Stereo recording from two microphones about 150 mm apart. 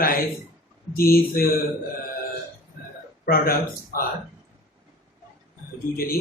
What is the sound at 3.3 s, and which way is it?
Speech, 75° left (ahead or behind).